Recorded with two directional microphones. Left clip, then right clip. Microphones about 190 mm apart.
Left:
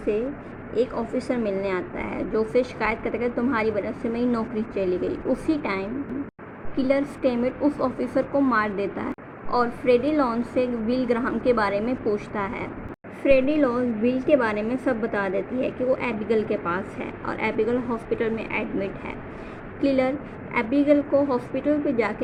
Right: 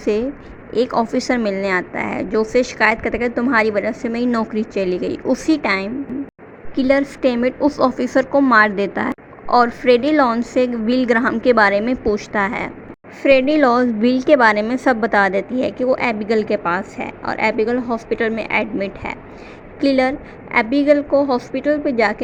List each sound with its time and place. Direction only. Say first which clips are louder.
0.7 s a woman's voice: right 7 dB; 45° right (ahead or behind)